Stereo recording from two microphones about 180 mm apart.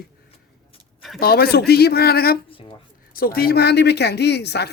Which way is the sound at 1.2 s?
60° left (ahead or behind).